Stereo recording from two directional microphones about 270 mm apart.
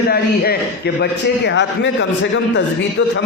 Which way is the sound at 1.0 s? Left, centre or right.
Left.